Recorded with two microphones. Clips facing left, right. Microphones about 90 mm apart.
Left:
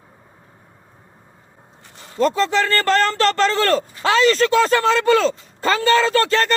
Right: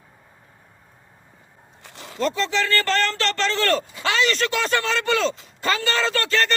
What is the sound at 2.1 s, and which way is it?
A man's voice, 40° left (ahead or behind).